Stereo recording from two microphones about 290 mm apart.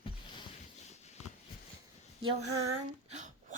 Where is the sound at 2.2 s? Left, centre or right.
Centre.